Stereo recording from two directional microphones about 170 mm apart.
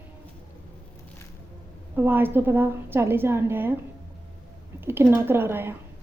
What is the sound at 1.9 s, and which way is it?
A woman's voice, 10° right (ahead or behind).